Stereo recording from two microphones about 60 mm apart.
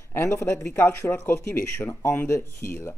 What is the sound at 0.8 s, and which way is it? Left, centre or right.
Speech, left.